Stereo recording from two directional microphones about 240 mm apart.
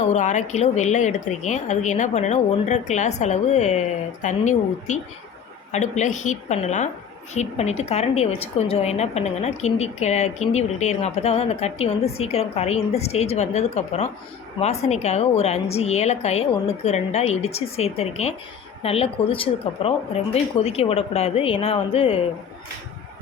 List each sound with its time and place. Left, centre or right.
0.1 s a woman's voice: left